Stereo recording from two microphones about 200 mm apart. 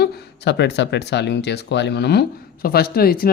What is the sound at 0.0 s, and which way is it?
Speech, 60° left (ahead or behind).